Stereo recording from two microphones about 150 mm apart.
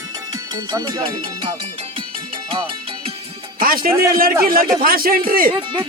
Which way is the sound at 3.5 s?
75° right (ahead or behind).